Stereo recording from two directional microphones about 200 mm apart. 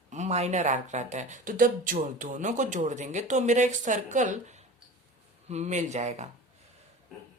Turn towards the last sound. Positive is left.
turn(degrees=-35)  # may be behind; listen again after turning